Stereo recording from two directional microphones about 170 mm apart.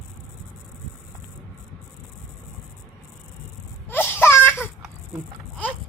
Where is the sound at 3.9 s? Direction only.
10° left (ahead or behind).